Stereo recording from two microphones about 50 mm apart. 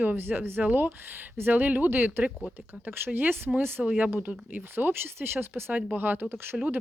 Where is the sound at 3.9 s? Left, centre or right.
Right.